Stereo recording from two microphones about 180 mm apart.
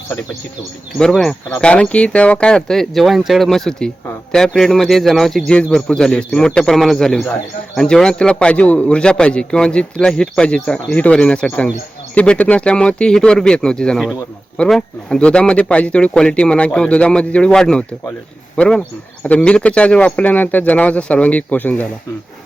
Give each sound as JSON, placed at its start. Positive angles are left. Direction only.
{"t": 0.9, "sound": "speech", "side_deg": 0}